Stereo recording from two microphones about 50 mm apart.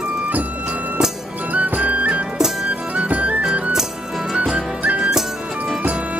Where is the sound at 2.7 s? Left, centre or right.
Right.